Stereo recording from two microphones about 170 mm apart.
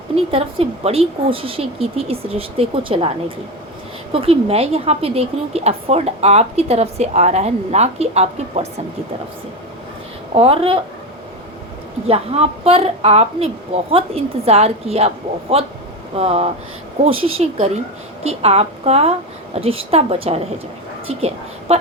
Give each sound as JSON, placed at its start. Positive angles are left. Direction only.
{"t": 0.3, "sound": "a woman's voice", "side_deg": -35}
{"t": 10.3, "sound": "a woman's voice", "side_deg": -35}
{"t": 12.0, "sound": "a woman's voice", "side_deg": -35}